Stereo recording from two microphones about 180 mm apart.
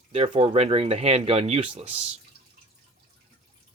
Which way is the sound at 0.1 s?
35° right (ahead or behind).